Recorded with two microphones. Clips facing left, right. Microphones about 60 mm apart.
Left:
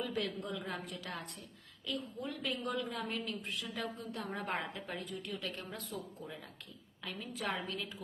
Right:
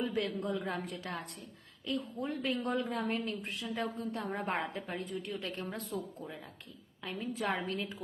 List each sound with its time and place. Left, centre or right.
0.0 s speech: right